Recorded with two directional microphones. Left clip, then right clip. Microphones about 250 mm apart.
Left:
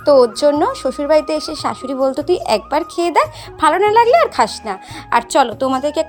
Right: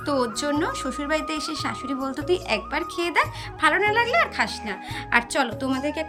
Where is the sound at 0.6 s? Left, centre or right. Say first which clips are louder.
Left 9 dB; left.